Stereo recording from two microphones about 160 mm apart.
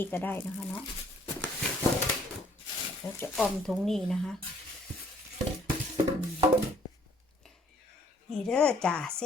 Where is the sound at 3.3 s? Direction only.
Centre (ahead or behind).